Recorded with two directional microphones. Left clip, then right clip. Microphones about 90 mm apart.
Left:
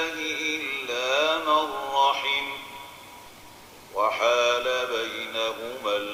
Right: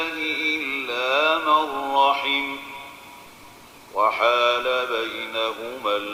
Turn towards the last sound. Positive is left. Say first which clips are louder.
# right 3 dB
turn(degrees=-35)  # may be behind; listen again after turning